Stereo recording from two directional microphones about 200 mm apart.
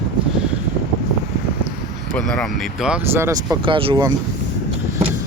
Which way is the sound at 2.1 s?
5° left (ahead or behind).